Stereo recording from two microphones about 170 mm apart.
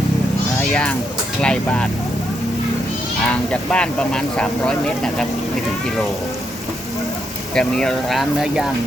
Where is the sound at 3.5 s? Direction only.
5° left (ahead or behind).